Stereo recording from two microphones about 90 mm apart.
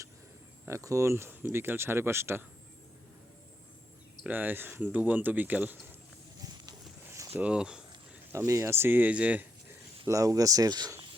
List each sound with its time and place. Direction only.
0.7 s speech: 35° right (ahead or behind)
4.3 s speech: 20° right (ahead or behind)
7.3 s speech: 10° right (ahead or behind)
8.3 s speech: 30° right (ahead or behind); by 9.7 s 15° right (ahead or behind)
10.1 s speech: 40° right (ahead or behind)